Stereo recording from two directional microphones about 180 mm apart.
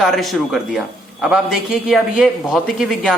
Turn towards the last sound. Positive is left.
turn(degrees=0)  # may be behind; listen again after turning